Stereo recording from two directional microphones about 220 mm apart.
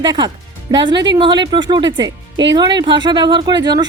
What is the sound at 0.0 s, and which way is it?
Speech, 20° right (ahead or behind).